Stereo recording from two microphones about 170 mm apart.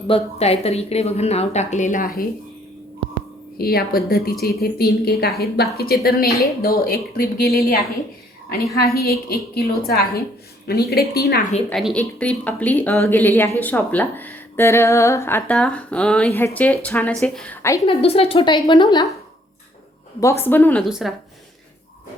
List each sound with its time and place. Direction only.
0.1 s a woman's voice: 35° left (ahead or behind)
3.6 s a woman's voice: 65° left (ahead or behind)
9.0 s a woman's voice: 65° left (ahead or behind)
11.7 s speech: centre (ahead or behind)
17.8 s a woman's voice: 35° left (ahead or behind)
20.4 s speech: 10° left (ahead or behind)
20.8 s speech: centre (ahead or behind)